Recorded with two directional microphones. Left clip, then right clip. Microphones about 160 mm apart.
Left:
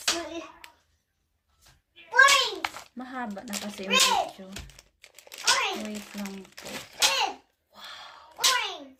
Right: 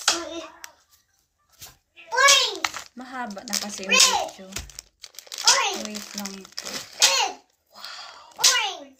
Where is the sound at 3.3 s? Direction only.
Centre (ahead or behind).